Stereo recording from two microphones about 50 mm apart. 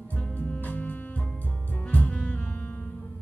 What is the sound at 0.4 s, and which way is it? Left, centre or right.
Music, left.